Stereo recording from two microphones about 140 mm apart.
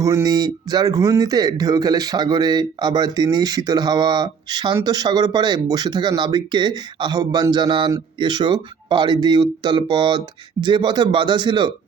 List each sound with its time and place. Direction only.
0.0 s a man's voice: 25° right (ahead or behind)